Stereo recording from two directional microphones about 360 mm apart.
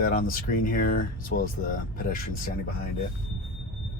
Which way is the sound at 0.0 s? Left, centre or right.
Left.